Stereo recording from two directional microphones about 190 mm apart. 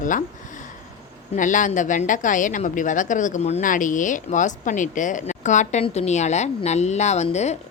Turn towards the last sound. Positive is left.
turn(degrees=35)  # may be behind; listen again after turning